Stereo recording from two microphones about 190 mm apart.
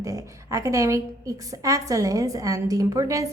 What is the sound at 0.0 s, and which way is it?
A woman's voice, 15° right (ahead or behind).